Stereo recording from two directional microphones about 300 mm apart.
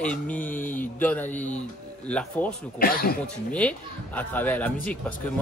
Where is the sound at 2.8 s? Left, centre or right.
Left.